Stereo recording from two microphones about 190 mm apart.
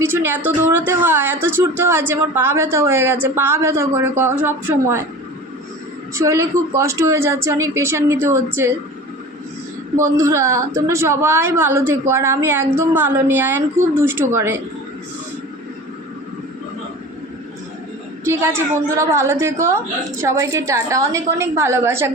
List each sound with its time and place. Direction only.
0.0 s speech: 10° right (ahead or behind)
6.1 s speech: 15° right (ahead or behind)
10.2 s speech: 15° right (ahead or behind)
18.3 s speech: 15° right (ahead or behind)